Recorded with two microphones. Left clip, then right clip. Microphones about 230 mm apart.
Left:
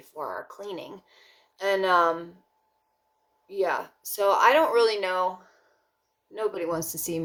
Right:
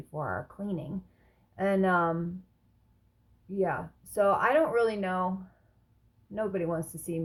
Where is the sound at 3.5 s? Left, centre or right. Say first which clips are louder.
Left 4 dB; centre.